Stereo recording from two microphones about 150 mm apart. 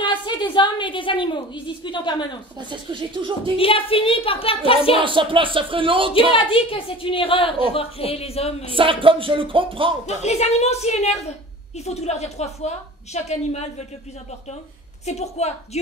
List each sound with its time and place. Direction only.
0.0 s a woman's voice: 30° left (ahead or behind)
2.7 s music: 35° right (ahead or behind)
3.5 s a woman's voice: 35° left (ahead or behind)
4.9 s music: 35° right (ahead or behind)
6.3 s a woman's voice: 35° left (ahead or behind)
8.7 s music: 35° right (ahead or behind)
10.0 s a woman's voice: 45° left (ahead or behind)
15.0 s a woman's voice: 45° left (ahead or behind)